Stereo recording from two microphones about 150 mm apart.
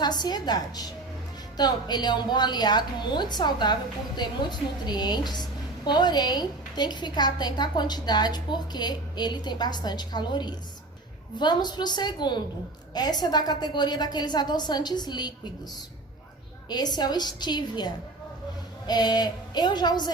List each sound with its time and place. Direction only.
0.0 s a woman's voice: 30° left (ahead or behind)
16.6 s a woman's voice: 25° left (ahead or behind)